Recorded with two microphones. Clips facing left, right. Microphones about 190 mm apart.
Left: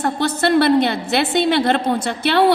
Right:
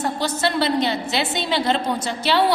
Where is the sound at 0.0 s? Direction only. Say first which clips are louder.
Left 4 dB; 60° left (ahead or behind).